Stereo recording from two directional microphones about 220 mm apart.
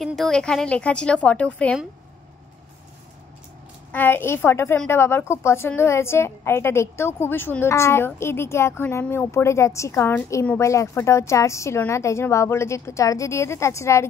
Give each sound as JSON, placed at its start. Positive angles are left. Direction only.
{"t": 0.0, "sound": "a woman's voice", "side_deg": 0}
{"t": 3.9, "sound": "a woman's voice", "side_deg": 10}